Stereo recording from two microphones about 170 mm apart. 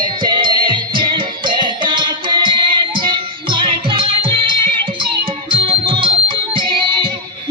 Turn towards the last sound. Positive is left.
turn(degrees=-30)  # may be behind; listen again after turning